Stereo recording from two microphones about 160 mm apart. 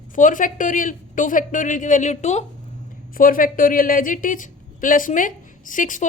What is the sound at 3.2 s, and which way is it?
A woman's voice, 60° left (ahead or behind).